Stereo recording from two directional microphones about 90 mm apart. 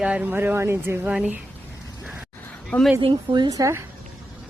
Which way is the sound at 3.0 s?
65° right (ahead or behind).